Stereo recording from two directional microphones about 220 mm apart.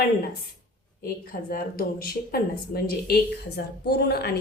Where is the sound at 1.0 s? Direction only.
45° left (ahead or behind).